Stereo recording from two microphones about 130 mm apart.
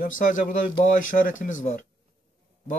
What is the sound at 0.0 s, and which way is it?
Speech, 90° left.